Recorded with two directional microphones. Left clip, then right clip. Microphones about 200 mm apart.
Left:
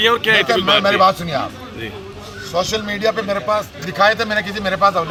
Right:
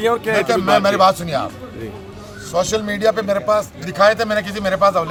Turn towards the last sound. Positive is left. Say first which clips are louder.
# even
turn(degrees=-30)  # may be behind; listen again after turning